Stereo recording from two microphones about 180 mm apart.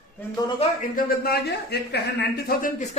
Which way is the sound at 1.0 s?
55° left (ahead or behind).